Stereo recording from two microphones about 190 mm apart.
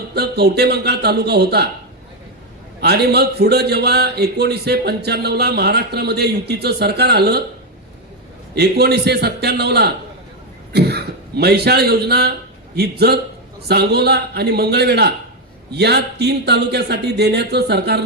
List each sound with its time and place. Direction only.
0.1 s speech: 60° right (ahead or behind)
2.8 s speech: 60° right (ahead or behind)
8.5 s a man's voice: 60° right (ahead or behind)